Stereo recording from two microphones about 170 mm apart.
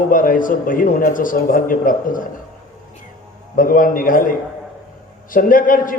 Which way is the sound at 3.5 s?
55° left (ahead or behind).